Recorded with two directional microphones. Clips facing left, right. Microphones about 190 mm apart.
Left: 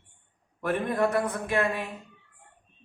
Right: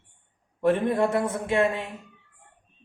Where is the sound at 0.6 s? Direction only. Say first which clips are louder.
Right 4 dB; 25° right (ahead or behind).